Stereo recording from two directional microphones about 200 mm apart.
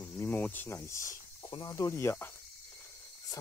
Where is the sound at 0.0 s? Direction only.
10° left (ahead or behind).